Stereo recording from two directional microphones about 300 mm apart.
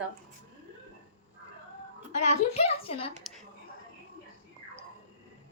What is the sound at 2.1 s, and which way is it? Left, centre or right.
Speech, left.